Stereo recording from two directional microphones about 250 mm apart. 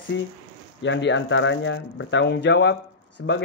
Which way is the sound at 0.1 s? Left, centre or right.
Left.